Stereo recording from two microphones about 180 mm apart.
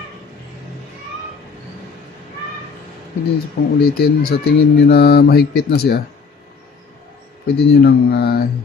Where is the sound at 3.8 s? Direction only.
60° left (ahead or behind).